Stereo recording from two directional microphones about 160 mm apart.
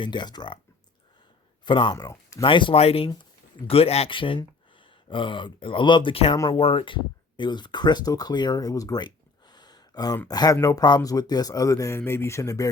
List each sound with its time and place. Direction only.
0.0 s speech: 30° left (ahead or behind)
1.6 s speech: 30° left (ahead or behind)
2.4 s speech: 30° left (ahead or behind)
6.3 s speech: 20° left (ahead or behind)
6.6 s speech: 35° left (ahead or behind); by 12.6 s 20° left (ahead or behind)